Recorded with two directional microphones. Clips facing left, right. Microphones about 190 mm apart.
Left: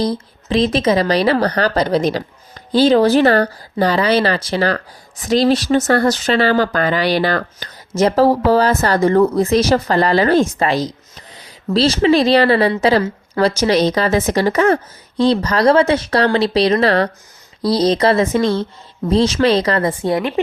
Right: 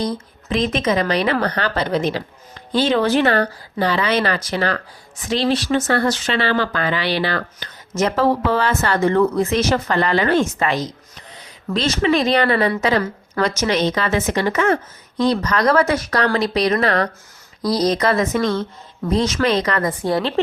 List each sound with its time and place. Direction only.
0.0 s speech: 35° left (ahead or behind); by 20.4 s 20° left (ahead or behind)